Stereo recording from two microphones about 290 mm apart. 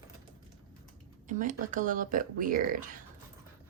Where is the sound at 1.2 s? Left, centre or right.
Right.